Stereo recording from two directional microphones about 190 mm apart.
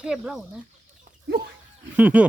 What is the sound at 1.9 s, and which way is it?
Speech, 10° right (ahead or behind).